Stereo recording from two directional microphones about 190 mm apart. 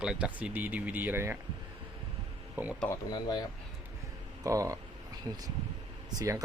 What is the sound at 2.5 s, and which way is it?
Speech, 10° right (ahead or behind).